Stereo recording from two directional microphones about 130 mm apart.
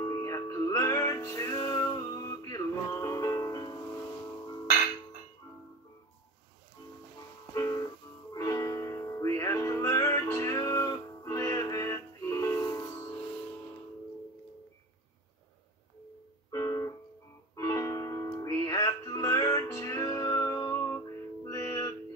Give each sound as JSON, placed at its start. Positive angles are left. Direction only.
{"t": 0.0, "sound": "music", "side_deg": 25}
{"t": 7.5, "sound": "music", "side_deg": 25}
{"t": 16.4, "sound": "music", "side_deg": 25}